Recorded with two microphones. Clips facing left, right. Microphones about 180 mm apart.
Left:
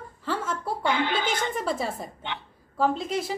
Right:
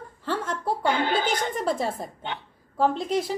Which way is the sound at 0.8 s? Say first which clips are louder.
Right 1 dB; 45° right (ahead or behind).